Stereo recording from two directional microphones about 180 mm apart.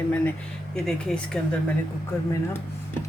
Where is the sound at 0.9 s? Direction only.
5° left (ahead or behind).